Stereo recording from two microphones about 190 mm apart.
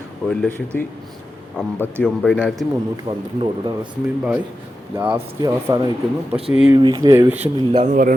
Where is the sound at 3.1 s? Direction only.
30° right (ahead or behind).